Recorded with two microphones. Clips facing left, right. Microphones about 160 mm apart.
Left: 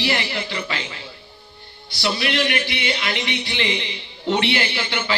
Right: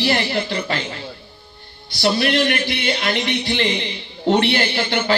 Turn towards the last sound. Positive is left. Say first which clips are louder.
# right 5 dB
turn(degrees=-45)  # may be behind; listen again after turning